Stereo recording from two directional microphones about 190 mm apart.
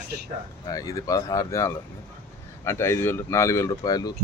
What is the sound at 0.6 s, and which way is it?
Speech, 20° left (ahead or behind).